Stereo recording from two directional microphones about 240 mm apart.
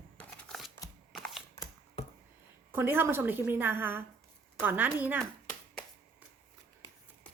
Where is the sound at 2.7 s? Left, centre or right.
Centre.